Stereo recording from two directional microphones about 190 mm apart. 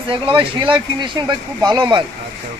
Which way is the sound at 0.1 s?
25° right (ahead or behind).